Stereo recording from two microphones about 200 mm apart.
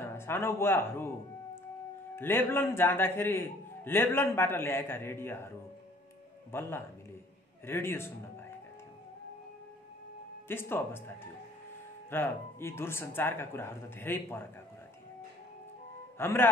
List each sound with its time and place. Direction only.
0.0 s speech: 10° left (ahead or behind)
2.1 s a man's voice: 10° left (ahead or behind)
6.5 s a man's voice: 10° left (ahead or behind)
10.5 s a man's voice: 10° left (ahead or behind)
12.1 s a man's voice: 10° left (ahead or behind)
16.2 s a man's voice: 10° left (ahead or behind)